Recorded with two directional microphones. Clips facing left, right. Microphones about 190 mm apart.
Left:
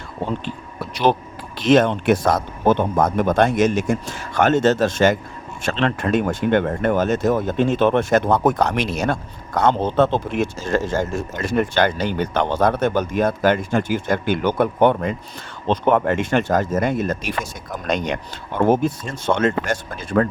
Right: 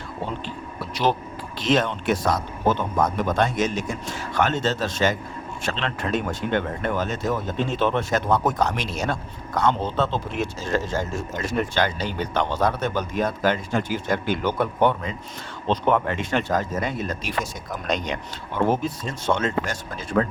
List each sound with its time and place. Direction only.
1.5 s speech: 50° left (ahead or behind)